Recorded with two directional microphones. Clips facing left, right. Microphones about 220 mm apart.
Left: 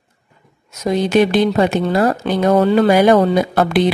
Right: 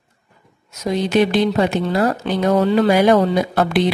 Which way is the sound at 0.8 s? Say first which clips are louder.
Left 2 dB; 50° left (ahead or behind).